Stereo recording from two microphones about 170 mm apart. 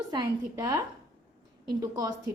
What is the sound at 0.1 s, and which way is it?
A woman's voice, 25° right (ahead or behind).